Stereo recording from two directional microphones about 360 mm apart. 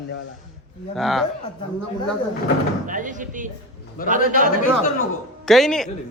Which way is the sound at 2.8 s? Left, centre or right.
Right.